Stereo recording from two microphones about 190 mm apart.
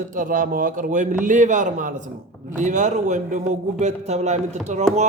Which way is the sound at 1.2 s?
40° right (ahead or behind).